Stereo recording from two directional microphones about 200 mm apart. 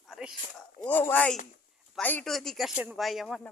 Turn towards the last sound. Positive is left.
turn(degrees=0)  # may be behind; listen again after turning